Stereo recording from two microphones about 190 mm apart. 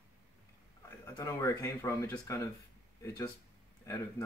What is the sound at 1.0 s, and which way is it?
Speech, 15° left (ahead or behind).